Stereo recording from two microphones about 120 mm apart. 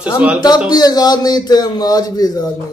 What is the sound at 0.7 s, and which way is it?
Speech, 35° left (ahead or behind).